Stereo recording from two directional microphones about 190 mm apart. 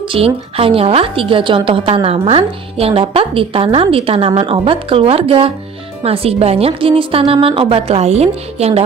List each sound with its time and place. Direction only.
0.1 s a woman's voice: 30° right (ahead or behind)